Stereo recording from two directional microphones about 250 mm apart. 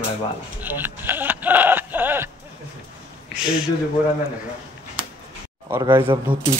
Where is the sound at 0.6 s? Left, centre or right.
Centre.